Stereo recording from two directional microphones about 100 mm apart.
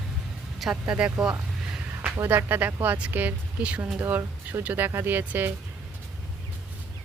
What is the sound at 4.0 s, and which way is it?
Speech, 25° right (ahead or behind).